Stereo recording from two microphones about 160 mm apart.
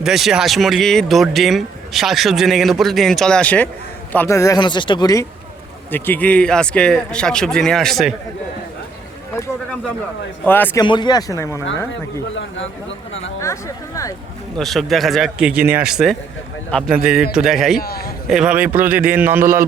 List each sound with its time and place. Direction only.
0.0 s speech: centre (ahead or behind); by 5.2 s 25° left (ahead or behind)
5.9 s speech: 10° left (ahead or behind)
10.4 s a man's voice: 10° left (ahead or behind)
10.8 s speech: 30° left (ahead or behind)
13.4 s speech: 20° left (ahead or behind)
14.6 s speech: centre (ahead or behind)
17.7 s a man's voice: 70° left (ahead or behind)
18.3 s a man's voice: 5° right (ahead or behind)